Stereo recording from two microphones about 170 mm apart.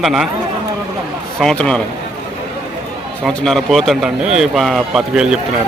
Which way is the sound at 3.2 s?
Centre (ahead or behind).